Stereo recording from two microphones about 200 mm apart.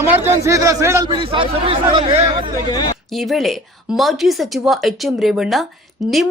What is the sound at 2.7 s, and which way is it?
Speech, 20° left (ahead or behind).